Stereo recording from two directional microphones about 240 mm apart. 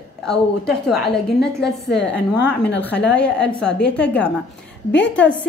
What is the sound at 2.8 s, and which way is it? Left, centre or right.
A woman's voice, centre.